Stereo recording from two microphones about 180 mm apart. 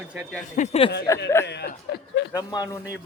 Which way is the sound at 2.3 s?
20° left (ahead or behind).